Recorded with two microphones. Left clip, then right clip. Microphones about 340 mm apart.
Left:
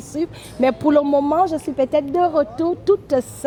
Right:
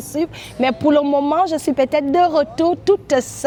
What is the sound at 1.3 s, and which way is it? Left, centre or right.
A woman's voice, right.